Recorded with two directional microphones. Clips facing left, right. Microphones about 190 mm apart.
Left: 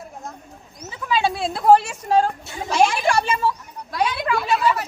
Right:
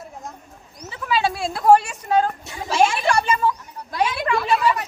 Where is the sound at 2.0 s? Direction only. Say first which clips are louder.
Left 1 dB; 30° left (ahead or behind).